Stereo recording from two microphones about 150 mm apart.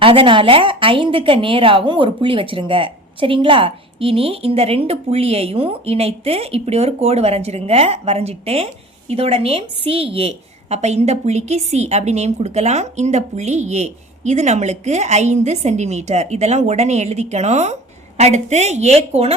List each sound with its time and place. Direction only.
0.0 s a woman's voice: 35° right (ahead or behind)